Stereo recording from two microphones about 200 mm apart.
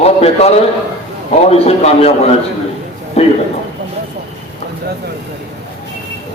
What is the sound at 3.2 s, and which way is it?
Speech, 30° left (ahead or behind).